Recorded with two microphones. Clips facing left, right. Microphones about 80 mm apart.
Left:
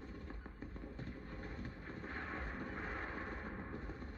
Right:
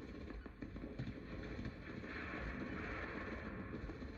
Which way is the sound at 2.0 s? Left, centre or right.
Left.